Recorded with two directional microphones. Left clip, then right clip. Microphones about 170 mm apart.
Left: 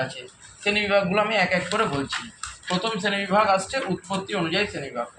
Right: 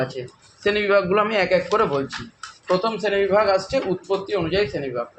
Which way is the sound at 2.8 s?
65° right (ahead or behind).